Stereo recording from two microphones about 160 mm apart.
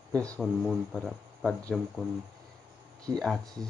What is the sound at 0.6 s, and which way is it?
Speech, centre (ahead or behind).